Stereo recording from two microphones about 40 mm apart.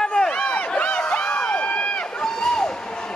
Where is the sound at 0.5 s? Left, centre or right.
Left.